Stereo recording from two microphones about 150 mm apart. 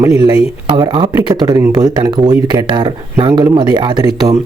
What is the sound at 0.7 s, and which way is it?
Speech, 30° right (ahead or behind).